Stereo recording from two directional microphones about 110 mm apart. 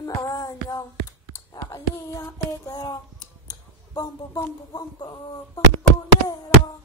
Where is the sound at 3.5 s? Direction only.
35° left (ahead or behind).